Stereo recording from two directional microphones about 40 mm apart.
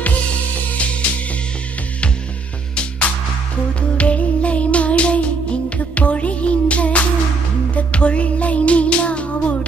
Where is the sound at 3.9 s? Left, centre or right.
Left.